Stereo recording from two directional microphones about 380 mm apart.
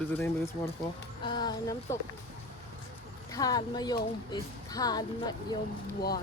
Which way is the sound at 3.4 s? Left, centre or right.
Centre.